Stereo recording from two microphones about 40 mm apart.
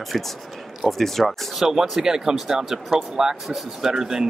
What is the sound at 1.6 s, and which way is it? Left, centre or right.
Speech, centre.